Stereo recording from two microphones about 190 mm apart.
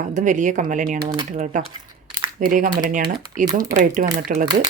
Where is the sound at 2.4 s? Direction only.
45° right (ahead or behind).